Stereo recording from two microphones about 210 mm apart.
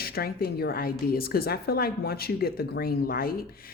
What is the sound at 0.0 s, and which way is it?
Speech, 45° left (ahead or behind).